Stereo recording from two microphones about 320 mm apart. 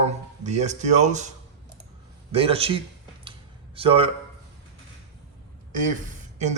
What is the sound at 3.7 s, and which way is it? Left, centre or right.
Speech, centre.